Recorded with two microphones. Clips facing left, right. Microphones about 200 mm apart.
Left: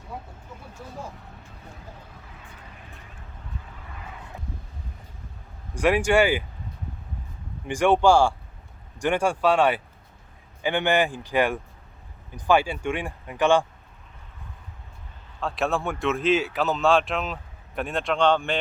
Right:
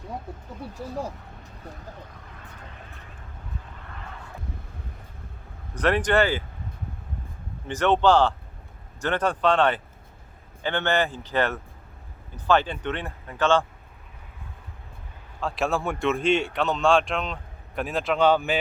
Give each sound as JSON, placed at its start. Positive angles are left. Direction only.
{"t": 5.7, "sound": "speech", "side_deg": 10}
{"t": 7.7, "sound": "speech", "side_deg": 10}
{"t": 15.4, "sound": "speech", "side_deg": 0}